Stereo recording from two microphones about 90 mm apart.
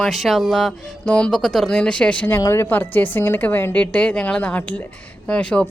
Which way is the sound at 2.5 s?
25° left (ahead or behind).